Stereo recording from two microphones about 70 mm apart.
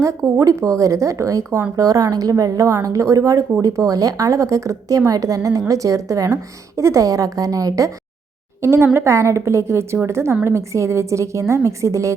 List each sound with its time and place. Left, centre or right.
0.0 s a woman's voice: right
8.6 s a woman's voice: right